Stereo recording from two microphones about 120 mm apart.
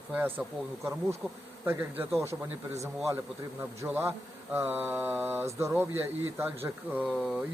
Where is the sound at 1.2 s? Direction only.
5° right (ahead or behind).